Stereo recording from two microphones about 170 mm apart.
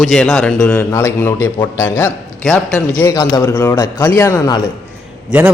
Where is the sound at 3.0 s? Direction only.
20° left (ahead or behind).